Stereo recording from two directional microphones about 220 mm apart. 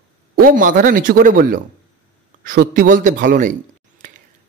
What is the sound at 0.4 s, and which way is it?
A man's voice, 40° right (ahead or behind).